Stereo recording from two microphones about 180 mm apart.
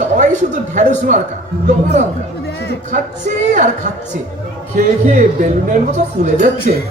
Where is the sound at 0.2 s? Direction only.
40° right (ahead or behind).